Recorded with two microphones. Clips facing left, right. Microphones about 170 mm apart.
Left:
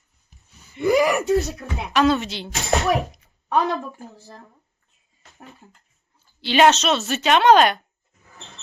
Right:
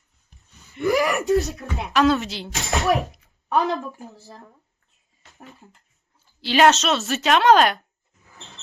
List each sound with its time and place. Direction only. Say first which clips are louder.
0.7 s speech: left 2 dB; 20° left (ahead or behind)
1.0 s speech: left 1 dB; centre (ahead or behind)
6.4 s speech: left 1 dB; centre (ahead or behind)